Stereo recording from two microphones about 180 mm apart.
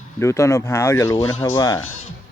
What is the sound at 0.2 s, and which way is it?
Speech, 15° left (ahead or behind).